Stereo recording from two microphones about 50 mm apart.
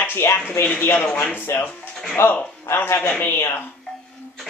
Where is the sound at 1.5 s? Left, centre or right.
Left.